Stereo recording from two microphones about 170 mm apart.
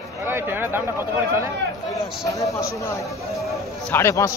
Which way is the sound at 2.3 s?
20° left (ahead or behind).